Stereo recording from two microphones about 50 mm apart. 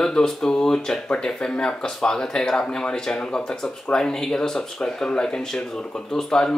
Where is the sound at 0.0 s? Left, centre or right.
Centre.